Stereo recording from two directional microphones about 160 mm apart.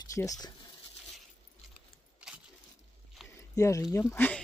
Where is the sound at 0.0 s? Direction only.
20° left (ahead or behind).